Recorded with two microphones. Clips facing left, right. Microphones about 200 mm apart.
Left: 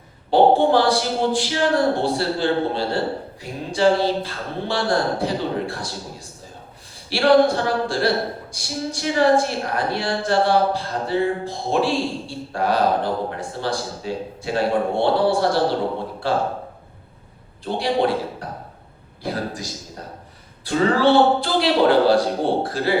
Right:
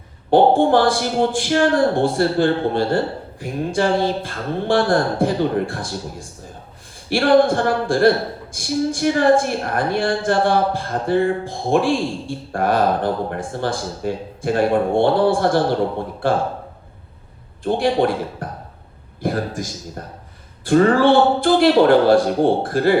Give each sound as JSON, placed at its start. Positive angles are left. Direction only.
{"t": 0.3, "sound": "a woman's voice", "side_deg": -50}
{"t": 17.6, "sound": "a woman's voice", "side_deg": -50}